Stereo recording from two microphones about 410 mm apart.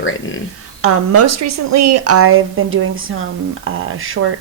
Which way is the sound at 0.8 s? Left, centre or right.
Right.